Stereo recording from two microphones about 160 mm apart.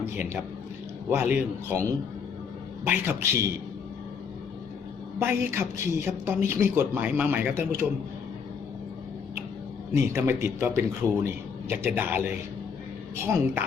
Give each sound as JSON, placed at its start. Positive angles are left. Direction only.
{"t": 0.0, "sound": "a man's voice", "side_deg": -10}
{"t": 5.2, "sound": "a man's voice", "side_deg": -15}
{"t": 9.9, "sound": "a man's voice", "side_deg": -15}